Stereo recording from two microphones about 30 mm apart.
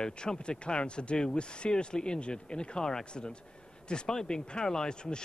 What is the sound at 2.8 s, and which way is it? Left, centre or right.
Speech, centre.